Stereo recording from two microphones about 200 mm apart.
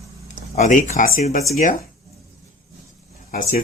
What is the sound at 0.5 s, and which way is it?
Speech, 40° left (ahead or behind).